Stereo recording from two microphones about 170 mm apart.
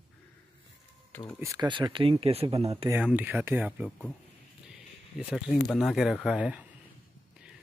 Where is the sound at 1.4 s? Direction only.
20° right (ahead or behind).